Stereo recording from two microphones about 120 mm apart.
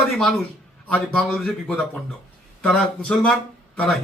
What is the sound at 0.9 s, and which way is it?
Speech, 10° left (ahead or behind).